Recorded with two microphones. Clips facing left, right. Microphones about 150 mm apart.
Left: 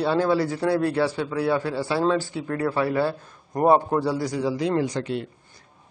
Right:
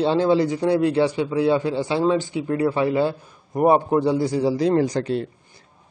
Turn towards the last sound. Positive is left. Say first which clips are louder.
# right 4 dB
turn(degrees=-35)  # may be behind; listen again after turning